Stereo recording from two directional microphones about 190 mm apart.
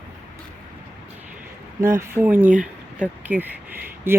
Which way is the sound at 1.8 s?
15° right (ahead or behind).